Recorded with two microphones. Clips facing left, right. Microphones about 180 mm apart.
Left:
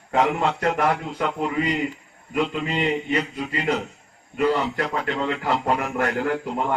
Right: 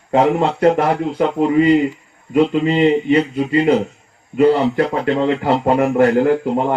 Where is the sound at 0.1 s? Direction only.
30° right (ahead or behind).